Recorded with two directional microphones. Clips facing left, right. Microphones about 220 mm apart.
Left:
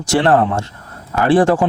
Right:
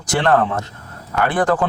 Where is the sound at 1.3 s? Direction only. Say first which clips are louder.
Left 6 dB; 30° left (ahead or behind).